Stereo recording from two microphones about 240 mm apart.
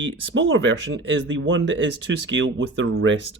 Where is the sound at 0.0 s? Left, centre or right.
Right.